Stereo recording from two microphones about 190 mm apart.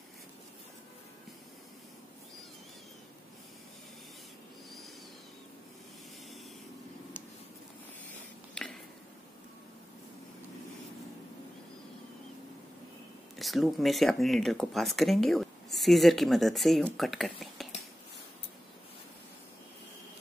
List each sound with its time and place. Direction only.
13.4 s speech: centre (ahead or behind)